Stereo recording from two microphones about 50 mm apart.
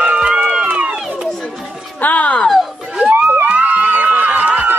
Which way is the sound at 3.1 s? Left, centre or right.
Right.